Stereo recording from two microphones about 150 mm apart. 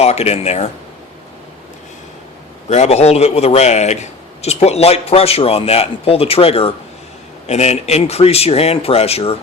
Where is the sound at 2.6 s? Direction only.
50° left (ahead or behind).